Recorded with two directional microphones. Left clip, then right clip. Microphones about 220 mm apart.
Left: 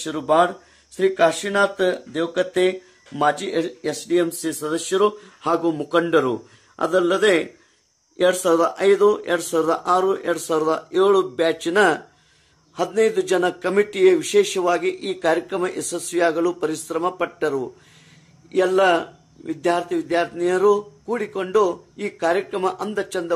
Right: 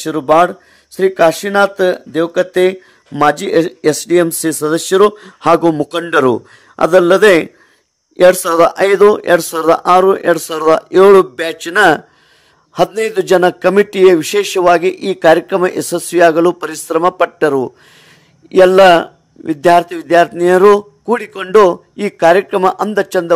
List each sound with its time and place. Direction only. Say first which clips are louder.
0.0 s speech: right 8 dB; 35° right (ahead or behind)